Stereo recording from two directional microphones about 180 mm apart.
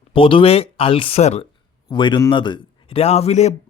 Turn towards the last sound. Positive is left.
turn(degrees=40)  # may be behind; listen again after turning